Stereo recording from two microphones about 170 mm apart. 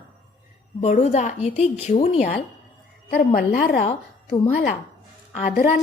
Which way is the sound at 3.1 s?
60° left (ahead or behind).